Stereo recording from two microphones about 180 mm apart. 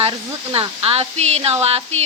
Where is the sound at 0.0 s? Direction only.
30° right (ahead or behind).